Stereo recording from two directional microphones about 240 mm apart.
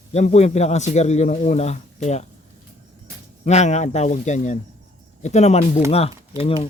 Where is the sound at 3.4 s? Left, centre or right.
Left.